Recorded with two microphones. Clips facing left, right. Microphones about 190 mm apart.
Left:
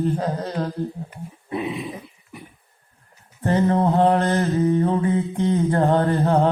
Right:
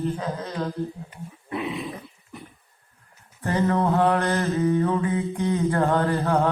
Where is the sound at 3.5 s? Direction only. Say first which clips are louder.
Left 3 dB; 30° left (ahead or behind).